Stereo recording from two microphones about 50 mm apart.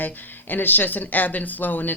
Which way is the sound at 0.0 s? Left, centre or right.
Left.